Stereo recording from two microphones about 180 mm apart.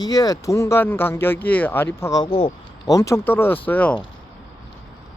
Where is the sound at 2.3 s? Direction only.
30° left (ahead or behind).